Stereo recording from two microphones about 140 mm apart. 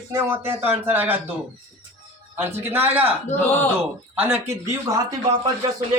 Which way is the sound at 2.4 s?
15° right (ahead or behind).